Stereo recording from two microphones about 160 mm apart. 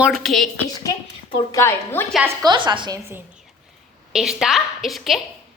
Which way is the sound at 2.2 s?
25° right (ahead or behind).